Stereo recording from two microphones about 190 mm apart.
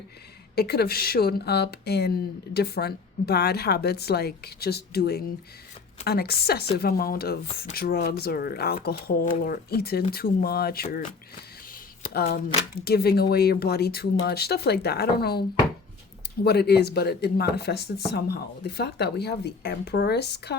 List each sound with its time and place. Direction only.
0.5 s speech: 55° left (ahead or behind)
12.0 s speech: 55° left (ahead or behind)